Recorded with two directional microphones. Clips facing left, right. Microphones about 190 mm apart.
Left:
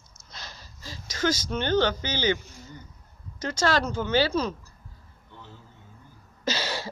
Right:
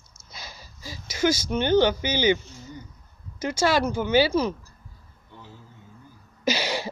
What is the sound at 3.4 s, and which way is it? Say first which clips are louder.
Speech: right 3 dB; 10° right (ahead or behind).